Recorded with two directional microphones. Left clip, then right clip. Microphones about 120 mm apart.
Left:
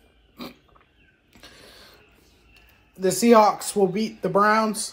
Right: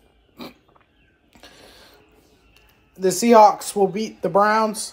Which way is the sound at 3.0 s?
30° right (ahead or behind).